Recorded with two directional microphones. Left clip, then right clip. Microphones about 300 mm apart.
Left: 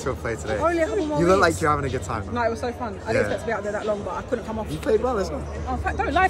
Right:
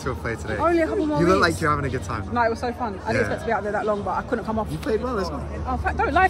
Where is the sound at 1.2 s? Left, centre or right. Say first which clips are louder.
Left 1 dB; centre.